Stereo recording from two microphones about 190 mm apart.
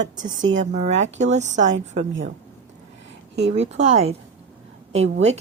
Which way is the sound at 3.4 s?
35° right (ahead or behind).